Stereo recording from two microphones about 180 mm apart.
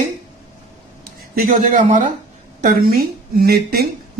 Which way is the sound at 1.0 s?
55° right (ahead or behind).